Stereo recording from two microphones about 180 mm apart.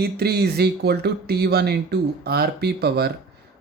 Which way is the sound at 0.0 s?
60° right (ahead or behind).